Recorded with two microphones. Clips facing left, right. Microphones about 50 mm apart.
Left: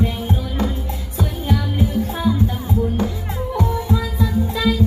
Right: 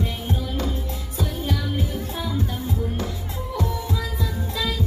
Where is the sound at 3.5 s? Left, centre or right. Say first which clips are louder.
Left 6 dB; left.